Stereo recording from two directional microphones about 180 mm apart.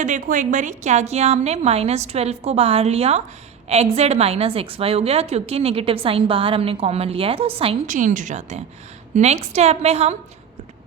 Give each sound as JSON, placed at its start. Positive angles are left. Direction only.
{"t": 0.0, "sound": "a woman's voice", "side_deg": -45}
{"t": 7.9, "sound": "a woman's voice", "side_deg": -45}